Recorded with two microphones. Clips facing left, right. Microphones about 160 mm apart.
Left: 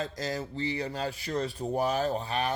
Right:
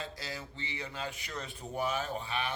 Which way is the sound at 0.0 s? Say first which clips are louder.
Left 9 dB; 45° left (ahead or behind).